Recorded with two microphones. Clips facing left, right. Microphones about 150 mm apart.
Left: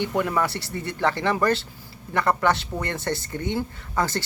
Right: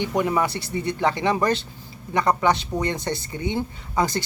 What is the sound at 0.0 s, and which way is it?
Speech, 15° right (ahead or behind).